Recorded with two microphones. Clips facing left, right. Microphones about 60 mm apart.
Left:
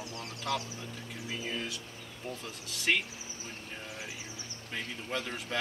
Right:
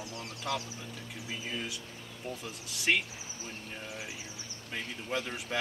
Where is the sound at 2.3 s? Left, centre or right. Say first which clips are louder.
Right 1 dB; centre.